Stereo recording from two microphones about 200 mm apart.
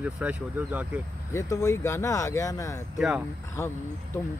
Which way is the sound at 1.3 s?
15° left (ahead or behind).